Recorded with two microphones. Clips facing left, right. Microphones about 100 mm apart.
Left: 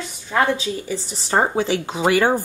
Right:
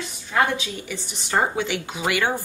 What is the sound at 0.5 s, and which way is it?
A woman's voice, 35° left (ahead or behind).